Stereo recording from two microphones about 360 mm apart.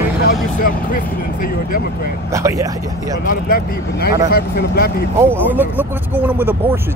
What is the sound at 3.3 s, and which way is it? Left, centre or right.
Speech, left.